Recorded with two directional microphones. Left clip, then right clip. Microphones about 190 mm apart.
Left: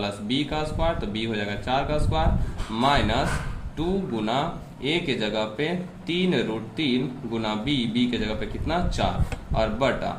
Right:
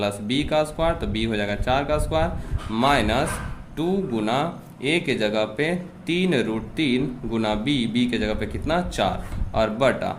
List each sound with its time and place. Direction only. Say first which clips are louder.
0.0 s speech: right 3 dB; 45° right (ahead or behind)